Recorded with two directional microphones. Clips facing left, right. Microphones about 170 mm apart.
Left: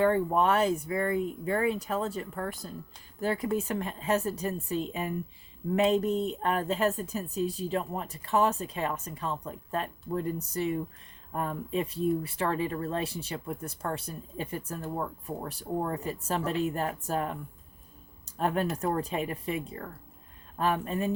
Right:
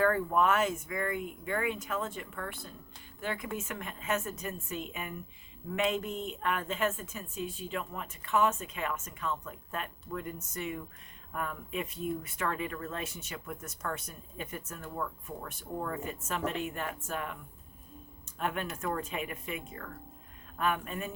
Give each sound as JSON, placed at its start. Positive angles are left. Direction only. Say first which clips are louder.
{"t": 0.0, "sound": "speech", "louder": "left 3 dB", "side_deg": 25}
{"t": 18.3, "sound": "speech", "louder": "left 6 dB", "side_deg": 35}